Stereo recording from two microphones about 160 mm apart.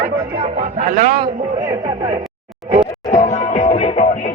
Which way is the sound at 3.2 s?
45° left (ahead or behind).